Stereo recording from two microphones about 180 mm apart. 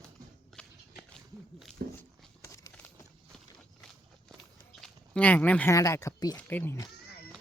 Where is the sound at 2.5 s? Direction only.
15° left (ahead or behind).